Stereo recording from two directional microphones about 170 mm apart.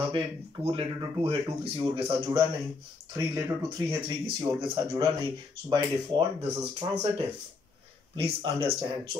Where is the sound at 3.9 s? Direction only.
30° right (ahead or behind).